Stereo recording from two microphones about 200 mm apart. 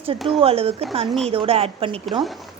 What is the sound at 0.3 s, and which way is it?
A woman's voice, 30° right (ahead or behind).